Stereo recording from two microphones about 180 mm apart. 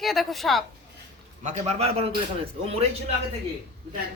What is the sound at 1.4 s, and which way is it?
A man's voice, 40° right (ahead or behind).